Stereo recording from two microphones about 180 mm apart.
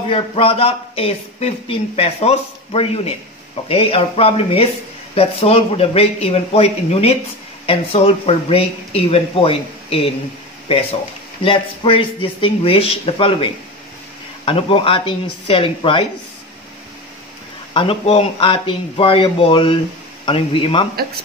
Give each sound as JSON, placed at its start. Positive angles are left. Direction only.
{"t": 0.1, "sound": "speech", "side_deg": 30}
{"t": 11.4, "sound": "speech", "side_deg": 30}
{"t": 17.7, "sound": "speech", "side_deg": 30}